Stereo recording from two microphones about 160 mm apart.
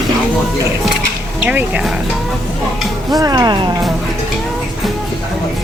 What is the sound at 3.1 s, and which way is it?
Speech, 25° right (ahead or behind).